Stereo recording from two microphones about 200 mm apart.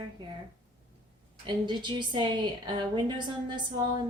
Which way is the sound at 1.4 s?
20° right (ahead or behind).